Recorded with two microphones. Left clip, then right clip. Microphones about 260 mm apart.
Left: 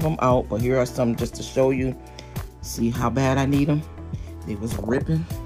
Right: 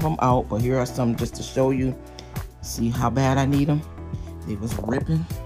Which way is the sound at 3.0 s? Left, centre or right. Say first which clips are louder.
Right 1 dB; centre.